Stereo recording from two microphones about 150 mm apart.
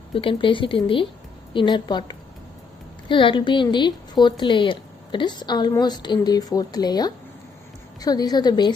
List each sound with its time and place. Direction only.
0.1 s a woman's voice: 35° left (ahead or behind)